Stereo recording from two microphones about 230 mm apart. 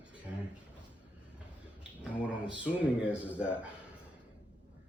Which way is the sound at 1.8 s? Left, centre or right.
Centre.